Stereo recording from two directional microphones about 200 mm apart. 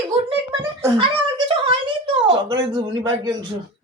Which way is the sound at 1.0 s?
25° right (ahead or behind).